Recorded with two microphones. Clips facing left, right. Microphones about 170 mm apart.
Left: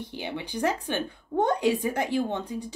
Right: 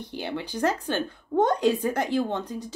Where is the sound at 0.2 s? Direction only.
15° left (ahead or behind).